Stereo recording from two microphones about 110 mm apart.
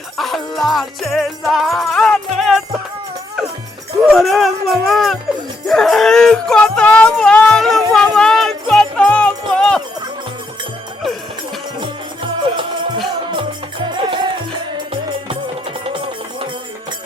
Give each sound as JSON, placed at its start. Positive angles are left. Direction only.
{"t": 0.2, "sound": "music", "side_deg": 0}
{"t": 4.1, "sound": "speech", "side_deg": 0}
{"t": 5.6, "sound": "music", "side_deg": 5}
{"t": 9.5, "sound": "a sound", "side_deg": 5}
{"t": 11.8, "sound": "music", "side_deg": -50}
{"t": 13.8, "sound": "music", "side_deg": -45}
{"t": 15.8, "sound": "music", "side_deg": -55}